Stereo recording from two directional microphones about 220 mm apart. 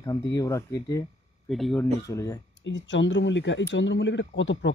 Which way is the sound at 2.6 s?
55° left (ahead or behind).